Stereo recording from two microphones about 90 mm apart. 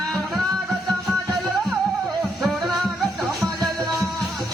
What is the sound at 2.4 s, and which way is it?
Music, centre (ahead or behind).